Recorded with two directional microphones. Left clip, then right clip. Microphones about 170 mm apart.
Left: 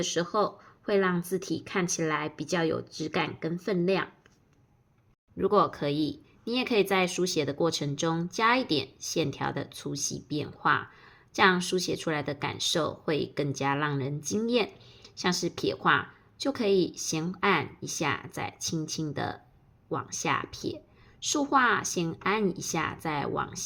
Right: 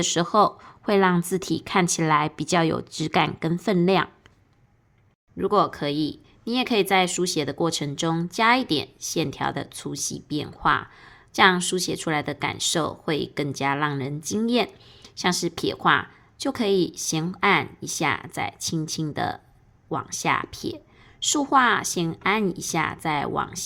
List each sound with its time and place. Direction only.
0.0 s a woman's voice: 45° right (ahead or behind)
5.4 s a woman's voice: 25° right (ahead or behind)